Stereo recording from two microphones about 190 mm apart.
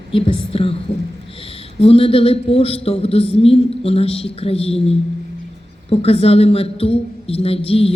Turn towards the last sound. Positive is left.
turn(degrees=30)  # may be behind; listen again after turning